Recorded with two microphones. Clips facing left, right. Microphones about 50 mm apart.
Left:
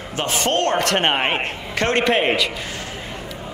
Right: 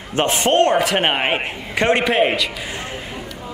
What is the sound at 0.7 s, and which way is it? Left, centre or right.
A man's voice, centre.